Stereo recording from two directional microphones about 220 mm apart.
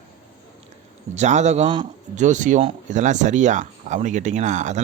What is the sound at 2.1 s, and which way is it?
Speech, 35° right (ahead or behind).